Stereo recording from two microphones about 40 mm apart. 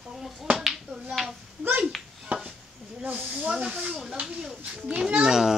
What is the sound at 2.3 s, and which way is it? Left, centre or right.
Chopping, right.